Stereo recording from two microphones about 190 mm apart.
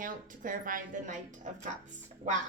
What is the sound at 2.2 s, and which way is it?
Speech, 40° right (ahead or behind).